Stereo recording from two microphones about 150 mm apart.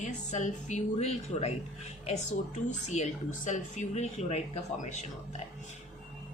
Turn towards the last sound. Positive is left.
turn(degrees=50)  # may be behind; listen again after turning